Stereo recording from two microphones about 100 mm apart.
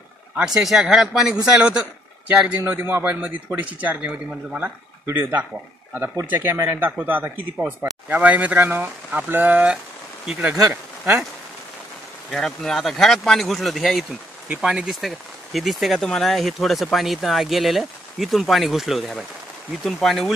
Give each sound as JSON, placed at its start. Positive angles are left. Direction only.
{"t": 0.5, "sound": "speech", "side_deg": -5}
{"t": 12.3, "sound": "speech", "side_deg": 5}